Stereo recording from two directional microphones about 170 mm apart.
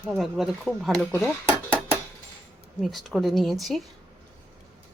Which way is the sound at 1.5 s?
15° right (ahead or behind).